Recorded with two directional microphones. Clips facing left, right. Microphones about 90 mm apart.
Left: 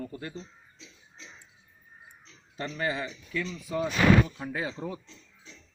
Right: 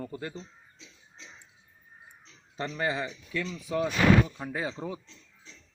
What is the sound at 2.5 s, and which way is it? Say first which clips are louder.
Speech: right 1 dB; 25° right (ahead or behind).